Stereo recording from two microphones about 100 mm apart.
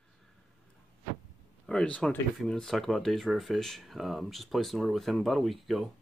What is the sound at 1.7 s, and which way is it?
Speech, 10° left (ahead or behind).